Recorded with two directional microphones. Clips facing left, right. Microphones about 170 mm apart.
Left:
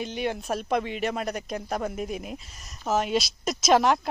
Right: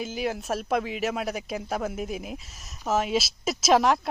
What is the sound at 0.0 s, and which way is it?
Speech, centre (ahead or behind).